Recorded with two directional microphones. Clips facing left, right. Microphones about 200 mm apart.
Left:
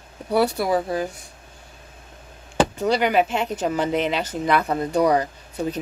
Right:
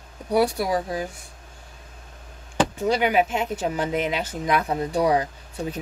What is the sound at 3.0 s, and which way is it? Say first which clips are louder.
A woman's voice: left 1 dB; 10° right (ahead or behind).